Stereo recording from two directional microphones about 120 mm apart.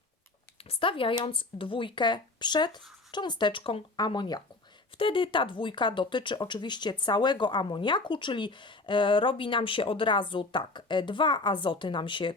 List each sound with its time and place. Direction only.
0.6 s speech: 50° left (ahead or behind)